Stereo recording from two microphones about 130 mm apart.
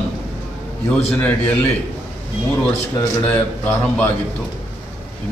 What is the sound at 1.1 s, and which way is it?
Speech, 15° left (ahead or behind).